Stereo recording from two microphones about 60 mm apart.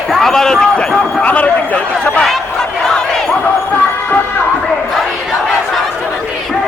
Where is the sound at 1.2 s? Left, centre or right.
Left.